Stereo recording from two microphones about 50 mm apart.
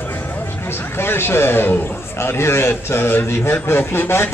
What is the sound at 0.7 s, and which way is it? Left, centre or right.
A man's voice, left.